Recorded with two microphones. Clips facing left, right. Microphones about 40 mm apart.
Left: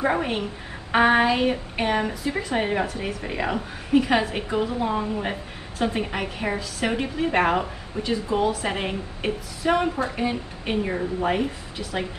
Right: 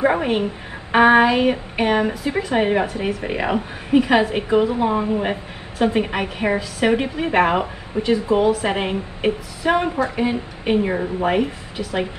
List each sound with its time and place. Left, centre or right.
0.0 s a woman's voice: centre
9.6 s a woman's voice: right
10.1 s a woman's voice: right